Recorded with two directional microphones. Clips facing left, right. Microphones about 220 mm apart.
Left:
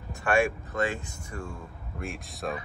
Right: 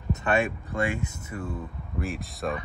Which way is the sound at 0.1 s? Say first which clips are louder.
Even; 20° right (ahead or behind).